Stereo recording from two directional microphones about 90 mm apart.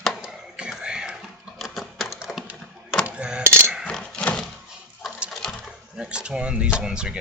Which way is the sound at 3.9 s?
10° left (ahead or behind).